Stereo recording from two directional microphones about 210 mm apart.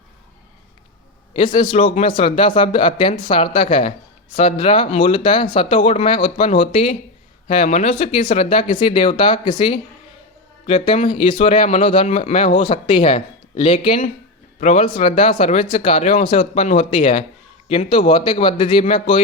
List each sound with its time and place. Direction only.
1.5 s speech: 25° left (ahead or behind)